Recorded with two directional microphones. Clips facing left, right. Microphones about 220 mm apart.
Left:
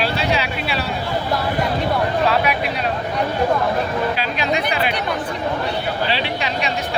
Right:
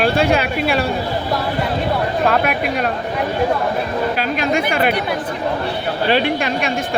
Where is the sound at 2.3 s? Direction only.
50° right (ahead or behind).